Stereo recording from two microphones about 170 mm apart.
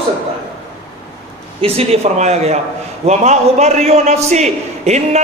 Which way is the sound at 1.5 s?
35° right (ahead or behind).